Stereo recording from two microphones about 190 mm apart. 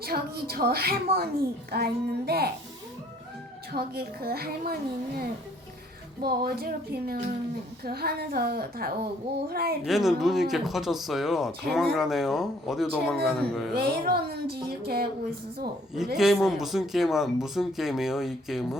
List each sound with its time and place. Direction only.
0.0 s a child's voice: 55° right (ahead or behind)
3.7 s a child's voice: 55° right (ahead or behind)
6.2 s music: 55° right (ahead or behind)
7.9 s a child's voice: 55° right (ahead or behind)
9.8 s speech: centre (ahead or behind)
13.7 s a child's voice: 55° right (ahead or behind)
16.1 s speech: centre (ahead or behind)